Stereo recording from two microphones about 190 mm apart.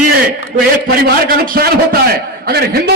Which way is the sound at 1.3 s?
50° right (ahead or behind).